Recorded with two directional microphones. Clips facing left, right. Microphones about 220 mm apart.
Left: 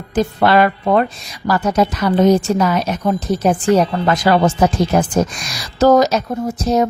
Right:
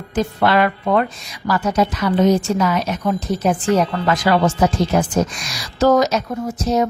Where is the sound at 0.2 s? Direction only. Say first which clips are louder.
Left 3 dB; 35° left (ahead or behind).